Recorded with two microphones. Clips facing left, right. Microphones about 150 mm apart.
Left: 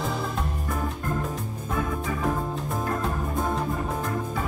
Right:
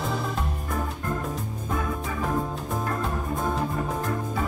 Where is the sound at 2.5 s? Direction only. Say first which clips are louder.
Left 1 dB; centre (ahead or behind).